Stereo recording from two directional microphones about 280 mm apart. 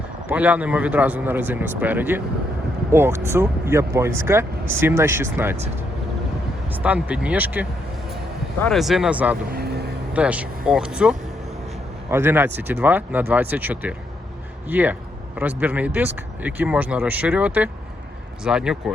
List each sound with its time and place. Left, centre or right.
0.3 s speech: centre
6.7 s speech: centre
9.5 s vehicle: right
10.2 s speech: centre